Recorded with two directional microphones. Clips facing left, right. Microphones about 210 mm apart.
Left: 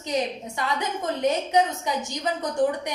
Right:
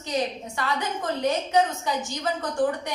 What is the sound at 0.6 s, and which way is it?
Speech, 20° left (ahead or behind).